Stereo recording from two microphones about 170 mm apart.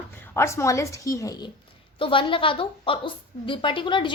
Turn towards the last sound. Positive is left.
turn(degrees=30)  # may be behind; listen again after turning